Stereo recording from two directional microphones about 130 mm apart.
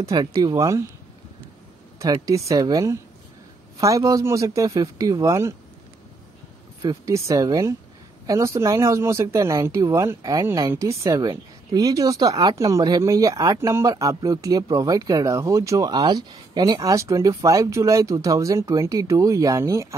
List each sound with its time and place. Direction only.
0.0 s speech: 30° right (ahead or behind)
2.0 s speech: 25° right (ahead or behind)
6.8 s speech: 25° right (ahead or behind)